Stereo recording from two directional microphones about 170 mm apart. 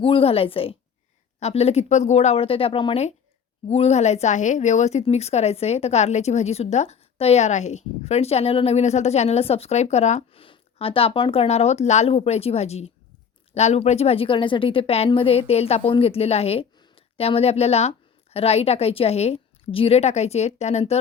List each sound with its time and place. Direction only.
0.0 s speech: 35° left (ahead or behind)